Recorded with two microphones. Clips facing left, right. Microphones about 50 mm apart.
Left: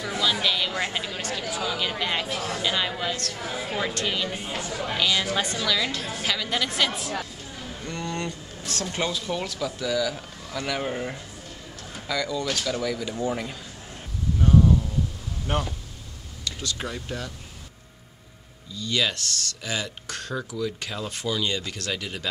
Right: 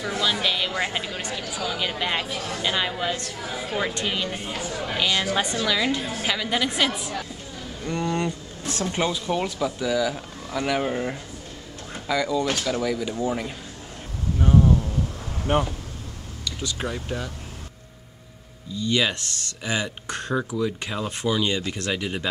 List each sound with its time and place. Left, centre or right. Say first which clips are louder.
0.2 s speech: even; centre
2.2 s speech: left 1 dB; centre
2.6 s speech: right 3 dB; centre
3.4 s speech: right 1 dB; centre
3.8 s speech: even; centre
18.8 s speech: right 3 dB; centre